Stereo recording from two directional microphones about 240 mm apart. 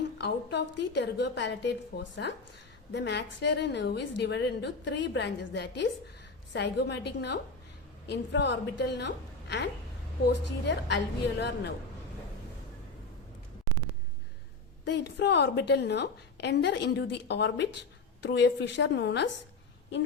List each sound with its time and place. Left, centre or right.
0.2 s a woman's voice: left
2.9 s a woman's voice: left
10.7 s a woman's voice: left
14.8 s a woman's voice: left